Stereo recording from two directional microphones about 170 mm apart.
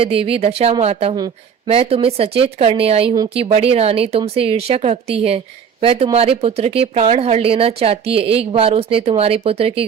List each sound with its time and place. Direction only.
0.0 s speech: 35° right (ahead or behind)